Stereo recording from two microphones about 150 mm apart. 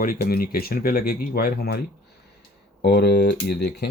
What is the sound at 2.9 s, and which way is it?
Speech, 90° left.